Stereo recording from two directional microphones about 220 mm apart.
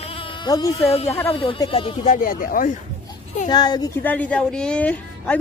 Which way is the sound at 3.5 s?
20° left (ahead or behind).